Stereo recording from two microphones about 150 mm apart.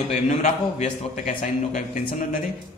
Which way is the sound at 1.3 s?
65° left (ahead or behind).